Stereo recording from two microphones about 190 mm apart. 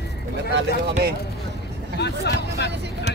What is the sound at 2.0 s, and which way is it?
Speech, 60° left (ahead or behind).